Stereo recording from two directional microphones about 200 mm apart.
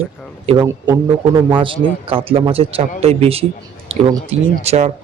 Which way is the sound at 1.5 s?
25° right (ahead or behind).